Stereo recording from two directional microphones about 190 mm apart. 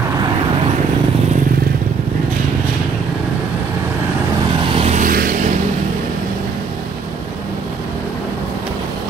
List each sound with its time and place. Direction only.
4.7 s vehicle: 35° right (ahead or behind)